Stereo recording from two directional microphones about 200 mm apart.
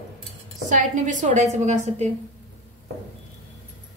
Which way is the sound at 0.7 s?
40° right (ahead or behind).